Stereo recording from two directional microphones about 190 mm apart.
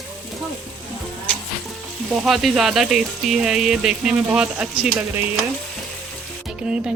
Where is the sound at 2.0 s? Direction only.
Centre (ahead or behind).